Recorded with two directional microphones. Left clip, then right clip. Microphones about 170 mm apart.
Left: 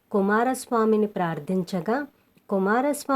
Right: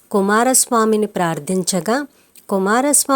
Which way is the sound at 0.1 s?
30° right (ahead or behind).